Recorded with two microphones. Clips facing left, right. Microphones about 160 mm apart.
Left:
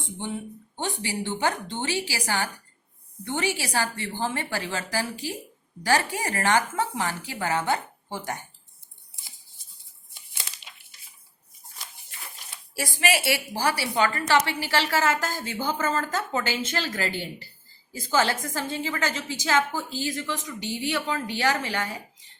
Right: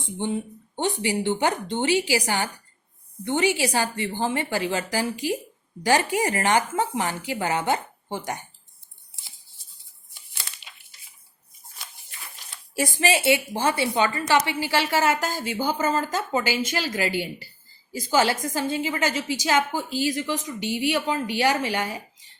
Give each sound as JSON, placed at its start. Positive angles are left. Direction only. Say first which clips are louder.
{"t": 0.8, "sound": "a woman's voice", "louder": "right 6 dB", "side_deg": -20}
{"t": 12.7, "sound": "a woman's voice", "louder": "right 3 dB", "side_deg": -20}